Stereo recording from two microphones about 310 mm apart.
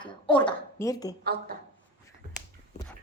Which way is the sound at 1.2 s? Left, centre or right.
Right.